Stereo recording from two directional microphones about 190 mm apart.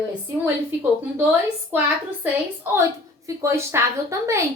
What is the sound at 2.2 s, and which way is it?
A child's voice, 10° right (ahead or behind).